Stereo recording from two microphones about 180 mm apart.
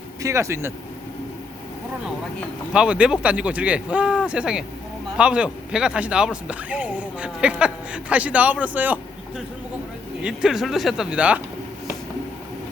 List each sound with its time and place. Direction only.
0.2 s speech: 15° right (ahead or behind)
2.7 s speech: 5° right (ahead or behind)
10.2 s speech: centre (ahead or behind)